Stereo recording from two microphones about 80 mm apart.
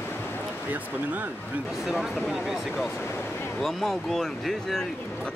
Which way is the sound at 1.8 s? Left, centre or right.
Centre.